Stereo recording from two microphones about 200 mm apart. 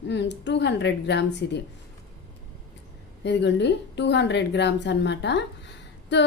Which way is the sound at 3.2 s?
60° left (ahead or behind).